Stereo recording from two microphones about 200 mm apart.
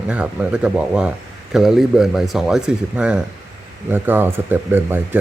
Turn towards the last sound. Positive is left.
turn(degrees=-10)  # may be behind; listen again after turning